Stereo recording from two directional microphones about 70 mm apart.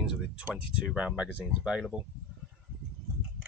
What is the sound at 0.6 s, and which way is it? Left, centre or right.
Speech, centre.